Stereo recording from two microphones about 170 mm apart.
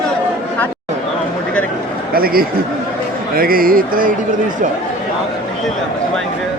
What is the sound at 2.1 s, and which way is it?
A man's voice, 60° right (ahead or behind).